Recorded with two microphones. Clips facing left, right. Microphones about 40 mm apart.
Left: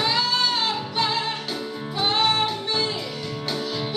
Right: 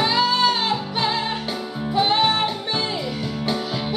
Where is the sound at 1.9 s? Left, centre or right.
Centre.